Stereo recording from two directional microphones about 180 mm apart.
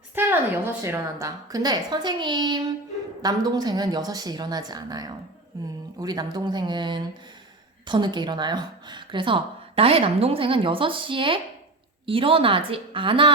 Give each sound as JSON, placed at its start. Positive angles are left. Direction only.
{"t": 0.2, "sound": "speech", "side_deg": -10}